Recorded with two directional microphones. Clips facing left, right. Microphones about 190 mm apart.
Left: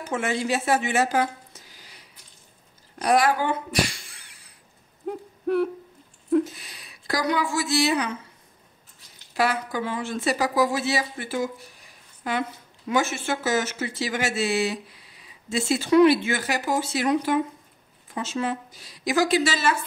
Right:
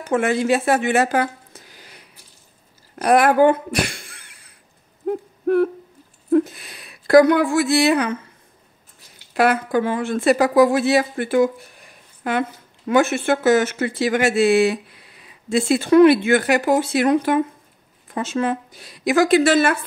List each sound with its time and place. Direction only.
0.0 s a woman's voice: 55° right (ahead or behind)
3.0 s speech: 55° right (ahead or behind)
6.3 s a woman's voice: 55° right (ahead or behind)
9.3 s speech: 60° right (ahead or behind)